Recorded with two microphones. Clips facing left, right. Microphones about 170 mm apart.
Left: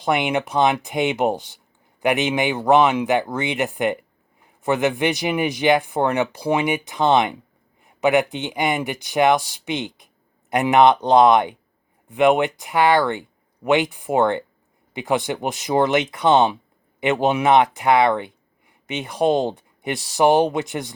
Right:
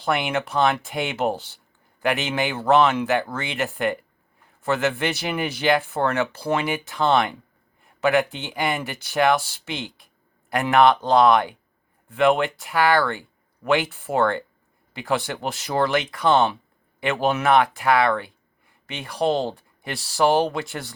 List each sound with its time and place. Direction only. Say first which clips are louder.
0.0 s speech: left 3 dB; 20° left (ahead or behind)